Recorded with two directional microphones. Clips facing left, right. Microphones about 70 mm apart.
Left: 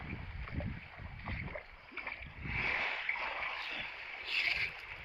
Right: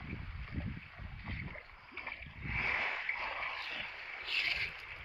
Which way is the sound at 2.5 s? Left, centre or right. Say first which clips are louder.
Even; centre.